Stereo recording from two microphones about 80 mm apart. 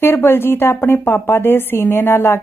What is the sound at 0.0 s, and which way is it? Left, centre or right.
A woman's voice, left.